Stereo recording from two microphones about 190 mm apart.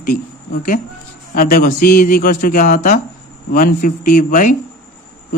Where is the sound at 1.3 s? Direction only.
50° left (ahead or behind).